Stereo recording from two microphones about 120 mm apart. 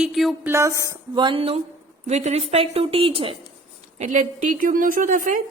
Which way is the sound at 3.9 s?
85° right.